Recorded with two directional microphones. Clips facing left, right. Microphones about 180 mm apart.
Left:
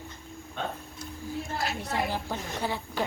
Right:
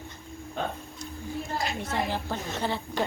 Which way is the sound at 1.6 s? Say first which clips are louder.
Even; 5° left (ahead or behind).